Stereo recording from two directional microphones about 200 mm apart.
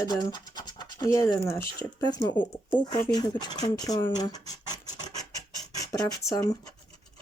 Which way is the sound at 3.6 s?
20° left (ahead or behind).